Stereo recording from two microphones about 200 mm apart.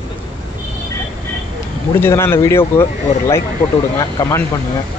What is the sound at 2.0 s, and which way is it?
A man's voice, 10° left (ahead or behind).